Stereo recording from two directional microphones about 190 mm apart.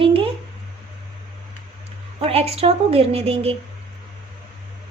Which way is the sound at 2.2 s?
30° right (ahead or behind).